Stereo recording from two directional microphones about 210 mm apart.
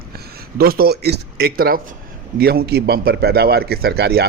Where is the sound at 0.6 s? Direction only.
45° right (ahead or behind).